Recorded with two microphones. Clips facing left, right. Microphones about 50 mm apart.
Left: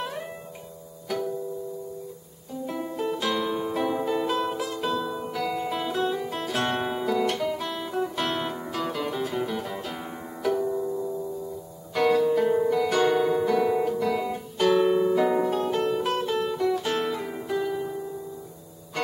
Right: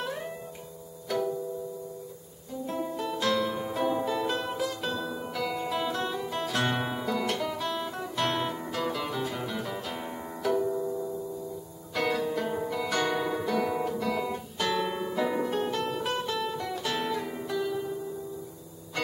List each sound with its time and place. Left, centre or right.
2.6 s music: centre
11.9 s music: centre
17.5 s music: centre